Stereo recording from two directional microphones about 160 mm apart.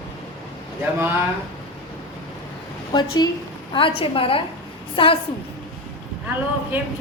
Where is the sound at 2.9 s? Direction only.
25° left (ahead or behind).